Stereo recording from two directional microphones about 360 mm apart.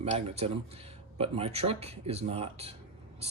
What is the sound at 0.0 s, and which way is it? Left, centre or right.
Speech, centre.